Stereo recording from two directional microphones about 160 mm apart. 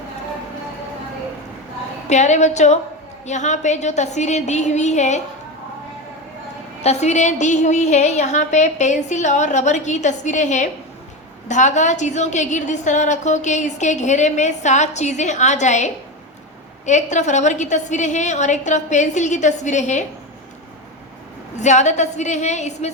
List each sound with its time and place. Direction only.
2.0 s a woman's voice: 45° left (ahead or behind)
6.8 s a woman's voice: 45° left (ahead or behind)
21.5 s a woman's voice: 45° left (ahead or behind)